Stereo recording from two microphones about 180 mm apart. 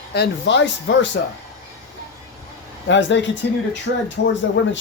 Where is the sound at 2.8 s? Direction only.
90° left.